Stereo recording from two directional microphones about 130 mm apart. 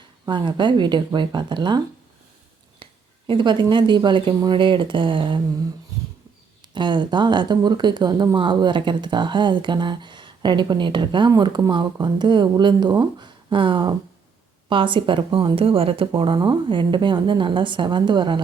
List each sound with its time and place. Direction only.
0.3 s speech: 35° right (ahead or behind)
3.2 s speech: 40° right (ahead or behind)
6.7 s speech: 35° right (ahead or behind)